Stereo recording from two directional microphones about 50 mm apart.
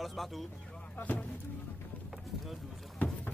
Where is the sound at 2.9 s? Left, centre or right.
Left.